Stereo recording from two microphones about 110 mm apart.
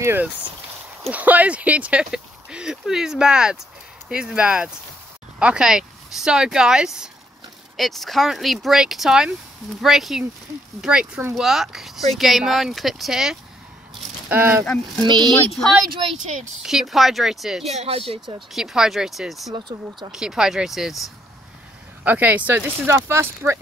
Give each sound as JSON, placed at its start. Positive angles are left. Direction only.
{"t": 0.0, "sound": "speech", "side_deg": -20}
{"t": 14.3, "sound": "speech", "side_deg": -15}
{"t": 15.2, "sound": "speech", "side_deg": 5}
{"t": 17.6, "sound": "speech", "side_deg": -70}
{"t": 18.5, "sound": "speech", "side_deg": -5}
{"t": 19.5, "sound": "speech", "side_deg": -45}
{"t": 20.1, "sound": "speech", "side_deg": -5}
{"t": 22.0, "sound": "speech", "side_deg": -15}